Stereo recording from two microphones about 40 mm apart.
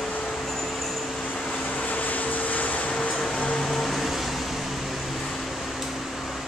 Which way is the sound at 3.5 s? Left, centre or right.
Centre.